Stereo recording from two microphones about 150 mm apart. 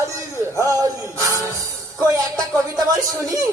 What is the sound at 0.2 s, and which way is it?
Music, 20° right (ahead or behind).